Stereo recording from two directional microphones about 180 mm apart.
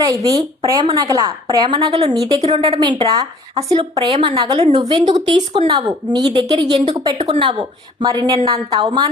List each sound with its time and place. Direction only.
0.3 s a woman's voice: 20° right (ahead or behind)